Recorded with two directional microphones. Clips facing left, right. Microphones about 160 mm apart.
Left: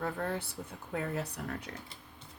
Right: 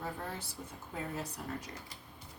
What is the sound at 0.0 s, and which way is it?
Speech, 65° left (ahead or behind).